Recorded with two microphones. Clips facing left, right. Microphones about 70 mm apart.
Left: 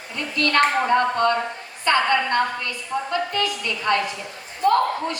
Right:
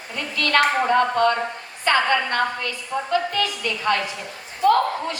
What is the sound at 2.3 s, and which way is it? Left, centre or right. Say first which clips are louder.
Speech: left 1 dB; left.